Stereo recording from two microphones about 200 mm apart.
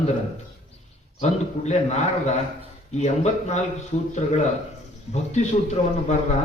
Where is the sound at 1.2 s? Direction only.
35° left (ahead or behind).